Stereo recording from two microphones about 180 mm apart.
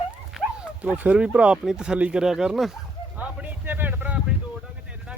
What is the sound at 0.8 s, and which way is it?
Speech, 10° right (ahead or behind).